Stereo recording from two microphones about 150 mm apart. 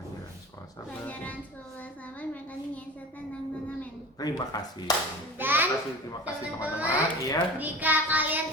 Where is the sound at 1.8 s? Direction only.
10° left (ahead or behind).